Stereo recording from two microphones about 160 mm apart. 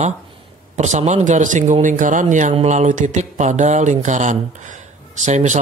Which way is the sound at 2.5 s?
45° right (ahead or behind).